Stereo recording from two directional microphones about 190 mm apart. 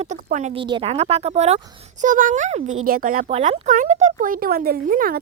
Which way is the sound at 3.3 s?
40° right (ahead or behind).